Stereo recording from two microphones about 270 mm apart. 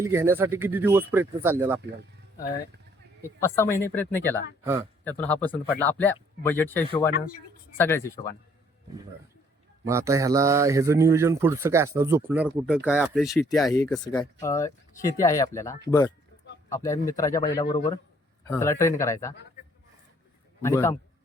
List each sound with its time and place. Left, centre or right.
0.0 s speech: centre
3.2 s speech: centre
4.6 s speech: centre
5.0 s speech: centre
9.8 s speech: centre
13.7 s speech: centre
20.6 s speech: centre